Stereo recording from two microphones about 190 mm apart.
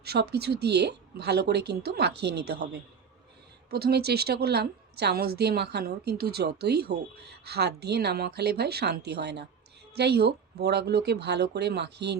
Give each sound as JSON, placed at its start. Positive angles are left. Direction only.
{"t": 0.0, "sound": "a woman's voice", "side_deg": -60}
{"t": 3.7, "sound": "a woman's voice", "side_deg": -55}